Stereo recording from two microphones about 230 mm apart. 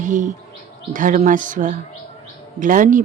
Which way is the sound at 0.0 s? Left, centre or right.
Right.